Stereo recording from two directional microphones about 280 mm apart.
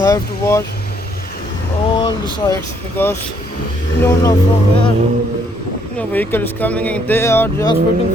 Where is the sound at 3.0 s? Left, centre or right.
Centre.